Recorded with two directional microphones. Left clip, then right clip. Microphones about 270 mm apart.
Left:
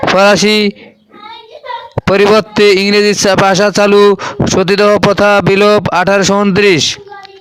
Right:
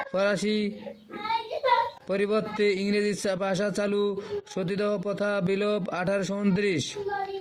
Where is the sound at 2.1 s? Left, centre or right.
Left.